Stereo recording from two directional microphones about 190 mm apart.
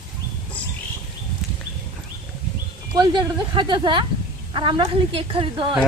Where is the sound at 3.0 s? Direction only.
25° right (ahead or behind).